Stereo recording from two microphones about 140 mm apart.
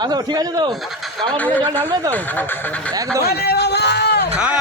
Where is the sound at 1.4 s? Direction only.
10° left (ahead or behind).